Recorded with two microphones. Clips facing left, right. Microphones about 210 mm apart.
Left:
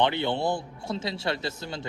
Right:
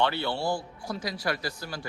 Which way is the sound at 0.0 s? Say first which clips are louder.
Left 3 dB; 20° left (ahead or behind).